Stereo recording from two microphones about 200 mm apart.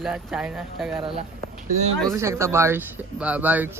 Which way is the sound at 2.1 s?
15° right (ahead or behind).